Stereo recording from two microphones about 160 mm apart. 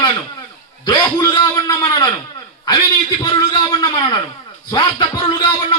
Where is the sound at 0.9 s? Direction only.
25° left (ahead or behind).